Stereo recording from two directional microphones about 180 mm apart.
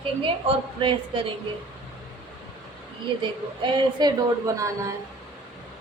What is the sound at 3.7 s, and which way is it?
A woman's voice, 20° right (ahead or behind).